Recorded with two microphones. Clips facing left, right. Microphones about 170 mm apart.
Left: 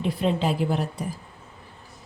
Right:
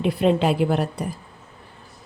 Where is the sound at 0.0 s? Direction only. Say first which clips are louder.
Right 5 dB; 65° right (ahead or behind).